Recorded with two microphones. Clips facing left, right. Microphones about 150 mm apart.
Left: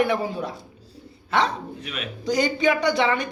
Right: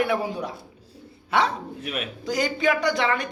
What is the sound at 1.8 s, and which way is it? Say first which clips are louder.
Speech: right 3 dB; 50° right (ahead or behind).